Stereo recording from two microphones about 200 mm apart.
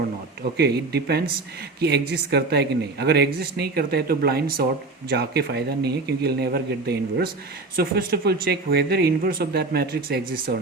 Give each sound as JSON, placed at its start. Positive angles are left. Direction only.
{"t": 0.5, "sound": "speech", "side_deg": -55}